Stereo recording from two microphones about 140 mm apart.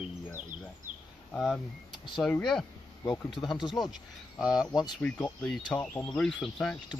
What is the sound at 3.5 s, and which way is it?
Speech, 30° left (ahead or behind).